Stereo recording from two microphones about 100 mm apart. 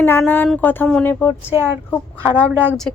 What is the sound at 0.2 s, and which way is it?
Speech, 20° left (ahead or behind).